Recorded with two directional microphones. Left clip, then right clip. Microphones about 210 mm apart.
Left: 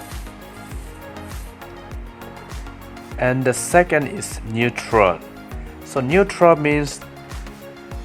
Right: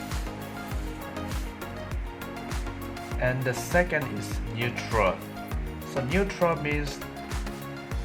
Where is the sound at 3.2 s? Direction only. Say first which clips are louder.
Left 9 dB; 40° left (ahead or behind).